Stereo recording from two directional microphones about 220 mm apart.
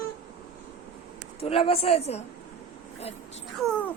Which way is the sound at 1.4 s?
25° left (ahead or behind).